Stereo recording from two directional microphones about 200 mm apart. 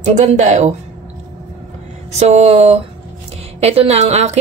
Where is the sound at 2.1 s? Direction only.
35° right (ahead or behind).